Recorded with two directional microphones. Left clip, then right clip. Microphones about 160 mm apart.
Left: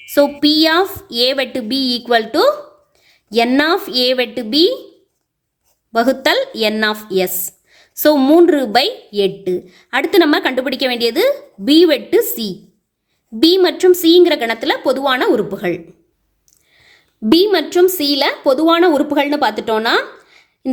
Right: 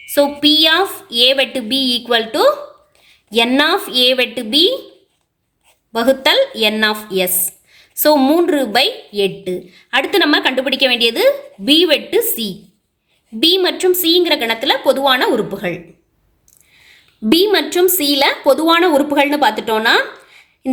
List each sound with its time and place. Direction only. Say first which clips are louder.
0.0 s a woman's voice: even; 45° left (ahead or behind)
5.9 s a woman's voice: right 1 dB; 45° left (ahead or behind)
16.8 s a woman's voice: even; 30° left (ahead or behind)